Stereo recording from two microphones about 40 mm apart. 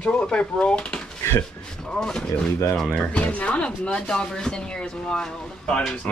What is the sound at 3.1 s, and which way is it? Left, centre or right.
Speech, left.